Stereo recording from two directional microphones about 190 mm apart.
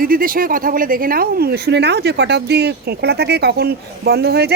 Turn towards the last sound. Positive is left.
turn(degrees=-55)  # may be behind; listen again after turning